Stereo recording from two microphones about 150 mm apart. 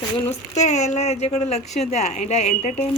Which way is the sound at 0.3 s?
50° left (ahead or behind).